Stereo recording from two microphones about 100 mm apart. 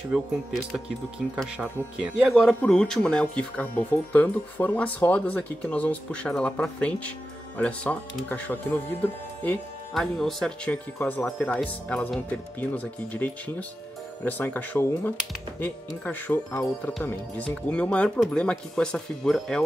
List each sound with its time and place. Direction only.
0.1 s speech: 5° right (ahead or behind)
2.6 s speech: 5° left (ahead or behind)
9.9 s speech: 5° left (ahead or behind)